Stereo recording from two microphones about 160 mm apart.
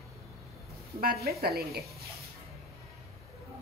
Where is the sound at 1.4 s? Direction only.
75° right (ahead or behind).